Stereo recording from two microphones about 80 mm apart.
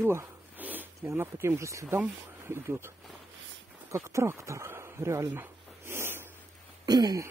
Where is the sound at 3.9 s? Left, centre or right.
Right.